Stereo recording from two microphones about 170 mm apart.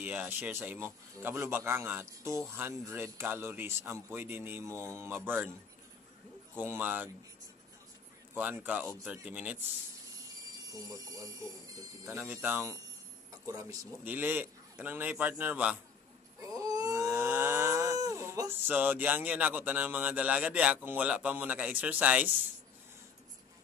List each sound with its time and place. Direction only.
0.0 s speech: 10° right (ahead or behind)
6.5 s speech: 10° right (ahead or behind)
8.4 s speech: 10° right (ahead or behind)
10.7 s speech: 20° right (ahead or behind)
12.2 s speech: 10° right (ahead or behind)
16.3 s a sound: 20° right (ahead or behind)